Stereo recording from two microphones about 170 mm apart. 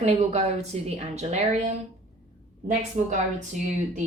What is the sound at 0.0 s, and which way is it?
A woman's voice, 40° right (ahead or behind).